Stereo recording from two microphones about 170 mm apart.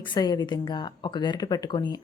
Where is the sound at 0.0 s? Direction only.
25° left (ahead or behind).